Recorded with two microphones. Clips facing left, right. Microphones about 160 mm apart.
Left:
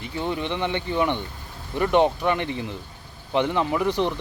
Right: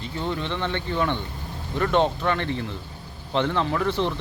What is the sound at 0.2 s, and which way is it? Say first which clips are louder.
Speech: left 2 dB; 15° left (ahead or behind).